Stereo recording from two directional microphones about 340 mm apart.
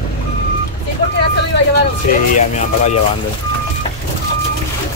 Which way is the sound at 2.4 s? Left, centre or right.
Centre.